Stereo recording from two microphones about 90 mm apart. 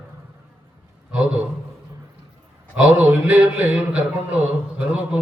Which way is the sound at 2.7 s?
10° right (ahead or behind).